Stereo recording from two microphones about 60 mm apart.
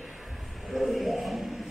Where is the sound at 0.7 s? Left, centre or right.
Centre.